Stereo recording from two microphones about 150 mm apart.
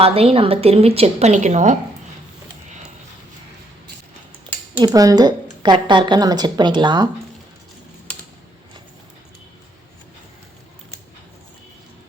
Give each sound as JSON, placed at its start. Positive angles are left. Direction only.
{"t": 0.0, "sound": "a woman's voice", "side_deg": -40}
{"t": 4.8, "sound": "a woman's voice", "side_deg": -25}